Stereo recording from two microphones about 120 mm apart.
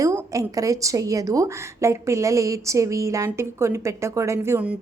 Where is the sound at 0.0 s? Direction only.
30° right (ahead or behind).